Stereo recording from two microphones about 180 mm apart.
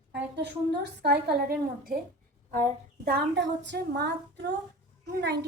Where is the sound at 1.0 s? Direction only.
65° right (ahead or behind).